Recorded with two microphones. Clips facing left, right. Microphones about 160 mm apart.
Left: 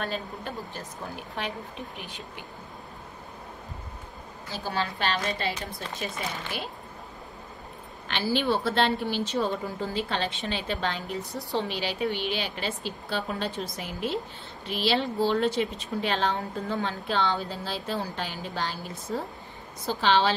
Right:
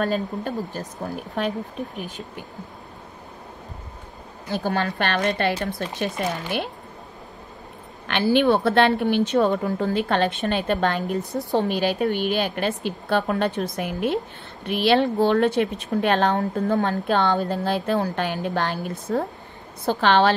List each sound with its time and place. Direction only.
0.0 s speech: 45° right (ahead or behind)
4.5 s a woman's voice: 55° right (ahead or behind)
8.1 s a woman's voice: 60° right (ahead or behind)